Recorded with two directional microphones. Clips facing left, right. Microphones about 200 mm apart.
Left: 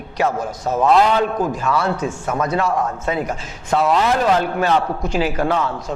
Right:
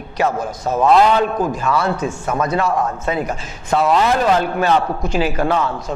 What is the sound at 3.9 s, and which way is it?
Speech, 30° right (ahead or behind).